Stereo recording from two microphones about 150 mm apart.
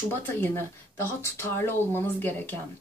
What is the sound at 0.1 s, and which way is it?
Speech, 15° left (ahead or behind).